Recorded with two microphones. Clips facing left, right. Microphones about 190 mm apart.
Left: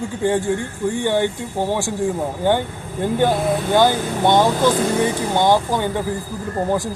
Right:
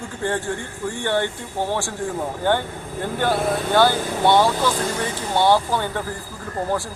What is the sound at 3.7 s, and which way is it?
Speech, 15° left (ahead or behind).